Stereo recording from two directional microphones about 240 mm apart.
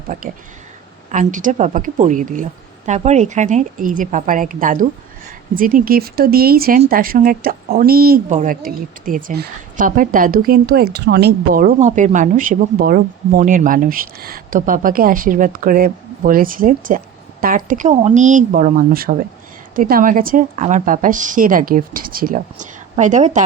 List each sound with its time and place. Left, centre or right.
0.1 s speech: right